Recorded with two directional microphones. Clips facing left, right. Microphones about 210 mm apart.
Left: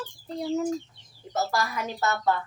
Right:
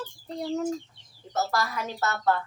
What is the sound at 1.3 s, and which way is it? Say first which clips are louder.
Female singing: even; 15° left (ahead or behind).